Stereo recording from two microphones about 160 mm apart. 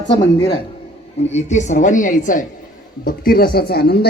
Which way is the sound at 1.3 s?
45° left (ahead or behind).